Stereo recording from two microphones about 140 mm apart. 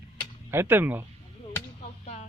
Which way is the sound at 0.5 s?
15° right (ahead or behind).